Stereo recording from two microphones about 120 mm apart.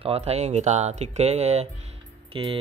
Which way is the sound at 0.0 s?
60° right (ahead or behind).